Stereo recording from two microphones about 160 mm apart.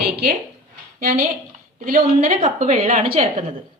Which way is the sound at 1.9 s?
60° right (ahead or behind).